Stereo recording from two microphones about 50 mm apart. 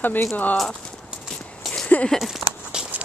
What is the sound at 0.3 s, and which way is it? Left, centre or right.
Speech, left.